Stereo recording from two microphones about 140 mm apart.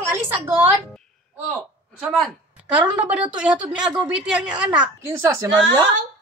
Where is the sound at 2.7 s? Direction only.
10° right (ahead or behind).